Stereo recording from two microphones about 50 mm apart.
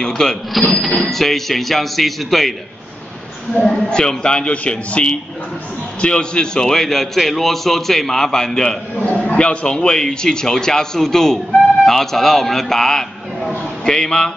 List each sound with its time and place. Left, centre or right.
0.0 s a man's voice: centre
3.8 s a man's voice: centre
9.2 s a man's voice: left